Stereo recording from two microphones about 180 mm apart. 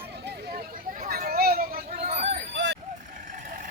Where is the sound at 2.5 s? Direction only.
75° right (ahead or behind).